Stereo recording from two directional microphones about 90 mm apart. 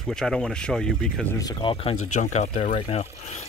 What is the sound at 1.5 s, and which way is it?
Speech, 80° left.